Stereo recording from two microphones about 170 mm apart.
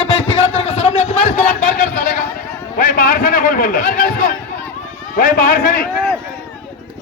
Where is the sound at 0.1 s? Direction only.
35° left (ahead or behind).